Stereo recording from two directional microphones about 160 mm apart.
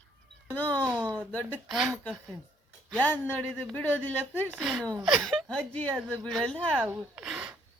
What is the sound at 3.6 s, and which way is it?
Speech, 10° left (ahead or behind).